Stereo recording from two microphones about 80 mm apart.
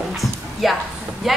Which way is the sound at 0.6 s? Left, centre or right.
Centre.